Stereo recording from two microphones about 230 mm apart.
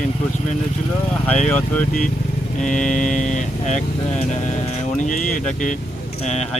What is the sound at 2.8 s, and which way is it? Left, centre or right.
Speech, left.